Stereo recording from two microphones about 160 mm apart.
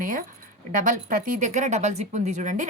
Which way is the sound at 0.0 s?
60° right (ahead or behind).